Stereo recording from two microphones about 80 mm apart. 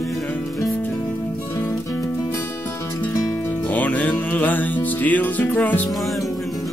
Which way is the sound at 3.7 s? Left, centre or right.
Centre.